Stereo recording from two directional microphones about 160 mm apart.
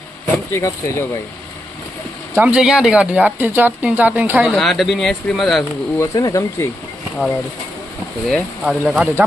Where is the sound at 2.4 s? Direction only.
5° right (ahead or behind).